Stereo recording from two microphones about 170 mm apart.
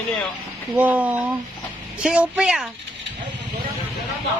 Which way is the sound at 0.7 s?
10° right (ahead or behind).